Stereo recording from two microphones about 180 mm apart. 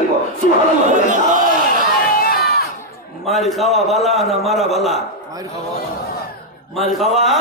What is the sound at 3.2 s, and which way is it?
A man's voice, centre (ahead or behind).